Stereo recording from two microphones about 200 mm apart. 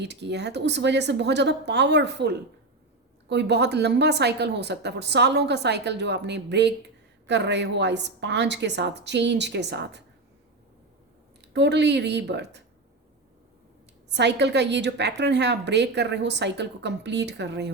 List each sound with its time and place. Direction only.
0.0 s a woman's voice: 60° right (ahead or behind)
11.5 s a woman's voice: 60° right (ahead or behind)
14.1 s a woman's voice: 60° right (ahead or behind)